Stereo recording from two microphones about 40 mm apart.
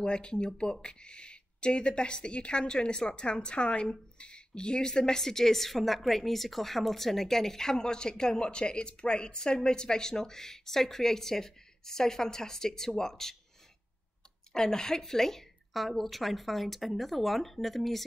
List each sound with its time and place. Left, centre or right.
0.0 s a woman's voice: left
14.5 s a woman's voice: centre